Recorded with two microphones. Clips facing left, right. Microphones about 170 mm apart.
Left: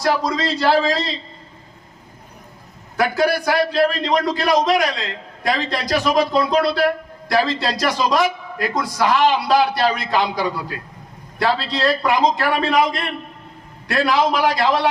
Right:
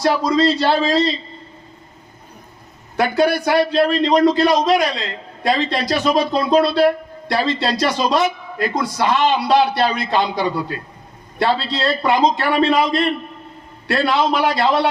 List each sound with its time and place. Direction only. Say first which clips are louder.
0.3 s a man's voice: right 2 dB; 25° right (ahead or behind)
3.0 s a man's voice: right 2 dB; 25° right (ahead or behind)